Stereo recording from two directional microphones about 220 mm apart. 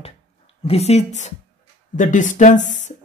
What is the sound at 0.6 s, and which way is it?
Speech, 25° left (ahead or behind).